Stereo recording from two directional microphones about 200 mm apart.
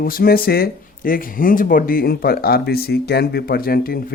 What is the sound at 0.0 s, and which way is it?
Speech, 45° left (ahead or behind).